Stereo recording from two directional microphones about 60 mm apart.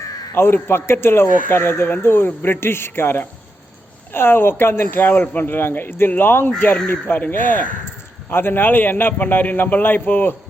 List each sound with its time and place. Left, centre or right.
0.3 s speech: left
8.3 s speech: left